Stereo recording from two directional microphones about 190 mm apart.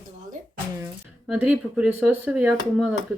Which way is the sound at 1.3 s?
5° right (ahead or behind).